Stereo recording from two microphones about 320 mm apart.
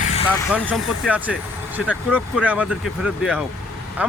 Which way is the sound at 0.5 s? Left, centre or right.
Centre.